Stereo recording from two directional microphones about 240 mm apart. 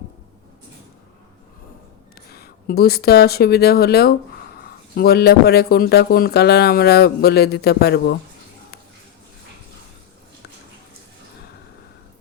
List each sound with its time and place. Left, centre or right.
2.3 s speech: left